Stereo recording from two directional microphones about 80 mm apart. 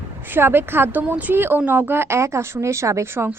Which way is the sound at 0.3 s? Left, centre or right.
Right.